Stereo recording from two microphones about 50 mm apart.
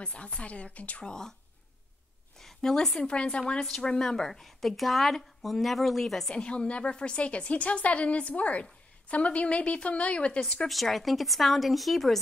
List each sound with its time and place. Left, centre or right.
0.0 s a woman's voice: centre
1.0 s speech: centre
2.3 s a sound: centre
3.0 s a woman's voice: left; by 6.3 s centre
6.3 s a woman's voice: centre
10.7 s speech: centre